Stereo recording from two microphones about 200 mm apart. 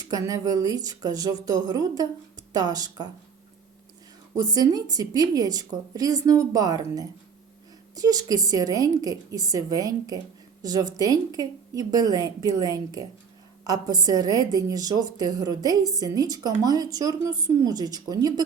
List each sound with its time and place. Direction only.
0.0 s a woman's voice: 15° right (ahead or behind)
4.4 s a woman's voice: 20° right (ahead or behind)